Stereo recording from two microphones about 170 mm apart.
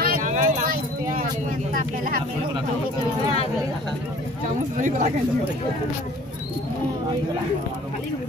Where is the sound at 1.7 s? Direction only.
55° right (ahead or behind).